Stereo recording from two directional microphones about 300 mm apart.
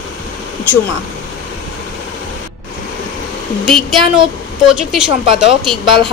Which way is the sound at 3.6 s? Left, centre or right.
Centre.